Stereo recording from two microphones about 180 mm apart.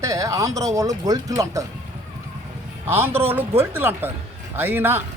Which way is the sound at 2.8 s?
15° right (ahead or behind).